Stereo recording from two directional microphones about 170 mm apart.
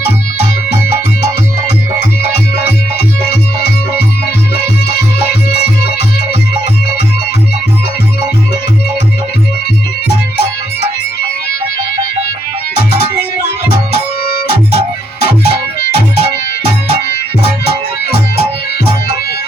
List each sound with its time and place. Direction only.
1.6 s music: 70° left (ahead or behind)
4.5 s music: 70° left (ahead or behind)
15.2 s music: 70° left (ahead or behind)